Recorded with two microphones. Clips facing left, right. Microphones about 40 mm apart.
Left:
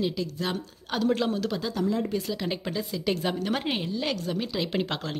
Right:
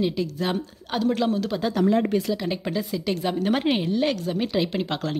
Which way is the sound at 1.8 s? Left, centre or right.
Right.